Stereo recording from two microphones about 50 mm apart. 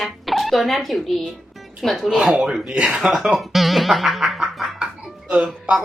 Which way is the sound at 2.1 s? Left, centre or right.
Centre.